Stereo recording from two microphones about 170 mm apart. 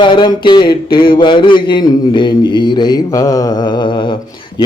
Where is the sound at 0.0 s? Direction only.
25° left (ahead or behind).